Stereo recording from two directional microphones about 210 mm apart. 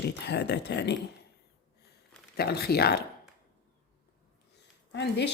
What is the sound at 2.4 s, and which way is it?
Speech, 50° left (ahead or behind).